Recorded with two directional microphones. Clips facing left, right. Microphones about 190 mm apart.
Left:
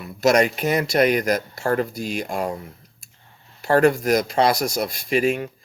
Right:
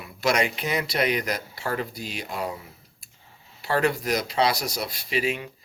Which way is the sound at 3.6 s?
45° left (ahead or behind).